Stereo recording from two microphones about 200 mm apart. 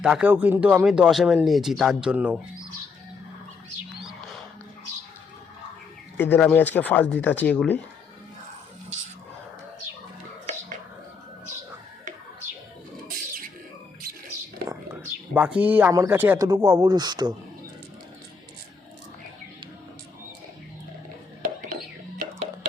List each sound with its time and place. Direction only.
0.0 s speech: 5° right (ahead or behind)
6.1 s speech: 10° left (ahead or behind)
15.3 s speech: 5° right (ahead or behind)